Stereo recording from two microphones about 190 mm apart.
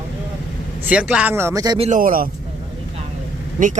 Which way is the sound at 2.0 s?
50° right (ahead or behind).